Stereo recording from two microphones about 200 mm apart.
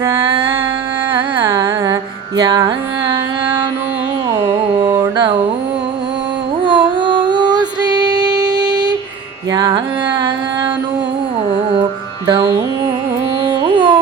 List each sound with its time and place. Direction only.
0.0 s music: 15° right (ahead or behind)
1.1 s carnatic music: 10° right (ahead or behind)
4.3 s music: 15° right (ahead or behind)
6.7 s female singing: 25° right (ahead or behind)
9.5 s carnatic music: 20° right (ahead or behind)
12.2 s music: 20° right (ahead or behind)
13.5 s carnatic music: 20° right (ahead or behind)